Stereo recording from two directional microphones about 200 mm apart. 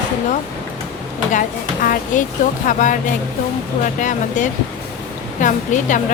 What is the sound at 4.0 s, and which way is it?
Speech, 40° left (ahead or behind).